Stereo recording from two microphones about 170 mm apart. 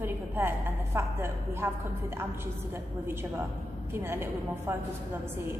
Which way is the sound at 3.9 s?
15° right (ahead or behind).